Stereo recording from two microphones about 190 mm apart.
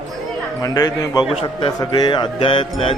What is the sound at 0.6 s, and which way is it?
A man's voice, 20° left (ahead or behind).